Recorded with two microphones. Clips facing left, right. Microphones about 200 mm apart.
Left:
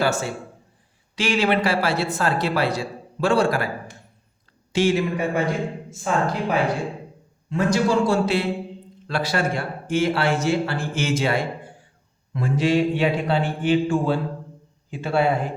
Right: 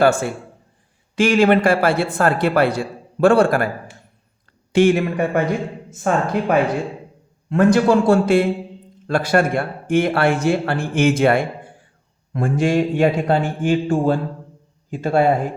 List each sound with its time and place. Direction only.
0.0 s a man's voice: 55° right (ahead or behind)
4.7 s a man's voice: 55° right (ahead or behind)